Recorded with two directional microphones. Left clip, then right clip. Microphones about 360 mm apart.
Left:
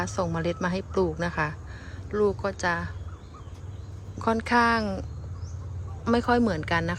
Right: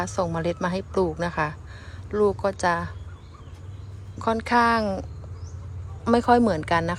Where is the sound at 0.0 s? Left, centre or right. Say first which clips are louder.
Right 3 dB; centre.